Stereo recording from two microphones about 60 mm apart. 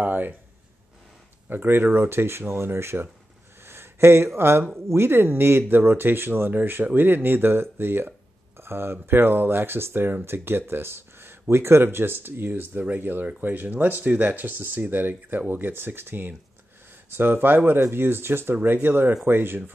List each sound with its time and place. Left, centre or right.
0.0 s speech: right
1.5 s speech: right
3.6 s a sound: right
4.4 s speech: right